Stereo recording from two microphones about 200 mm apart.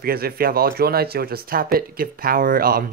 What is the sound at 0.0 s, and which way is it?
Speech, 50° right (ahead or behind).